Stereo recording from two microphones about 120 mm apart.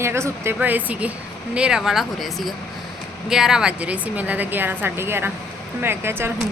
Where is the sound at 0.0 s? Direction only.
20° right (ahead or behind).